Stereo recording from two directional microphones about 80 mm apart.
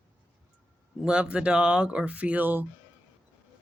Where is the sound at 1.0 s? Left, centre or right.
Centre.